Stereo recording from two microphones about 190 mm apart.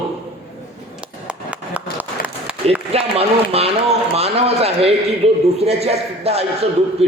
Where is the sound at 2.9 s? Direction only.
30° right (ahead or behind).